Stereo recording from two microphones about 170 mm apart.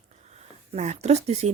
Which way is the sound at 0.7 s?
40° right (ahead or behind).